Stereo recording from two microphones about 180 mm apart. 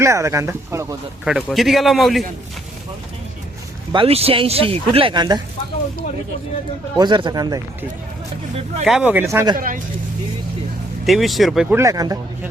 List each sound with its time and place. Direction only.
0.0 s speech: 15° right (ahead or behind)
1.2 s speech: centre (ahead or behind)
3.9 s speech: 35° right (ahead or behind)
6.9 s speech: 25° right (ahead or behind)
8.8 s speech: centre (ahead or behind)
9.6 s speech: 50° right (ahead or behind)
11.0 s speech: centre (ahead or behind); by 12.2 s 20° right (ahead or behind)